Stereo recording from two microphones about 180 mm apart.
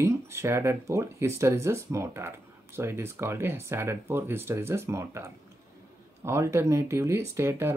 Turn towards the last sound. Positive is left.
turn(degrees=-15)  # may be behind; listen again after turning